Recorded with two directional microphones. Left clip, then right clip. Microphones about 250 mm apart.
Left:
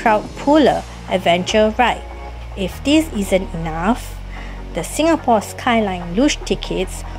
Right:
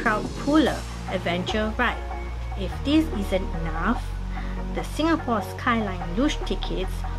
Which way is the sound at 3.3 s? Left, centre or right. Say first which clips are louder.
Left 9 dB; centre.